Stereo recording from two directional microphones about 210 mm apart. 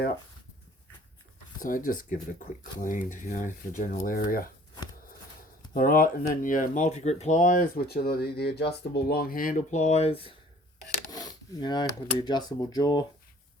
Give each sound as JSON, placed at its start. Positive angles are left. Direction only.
{"t": 1.6, "sound": "speech", "side_deg": 40}
{"t": 5.7, "sound": "speech", "side_deg": 40}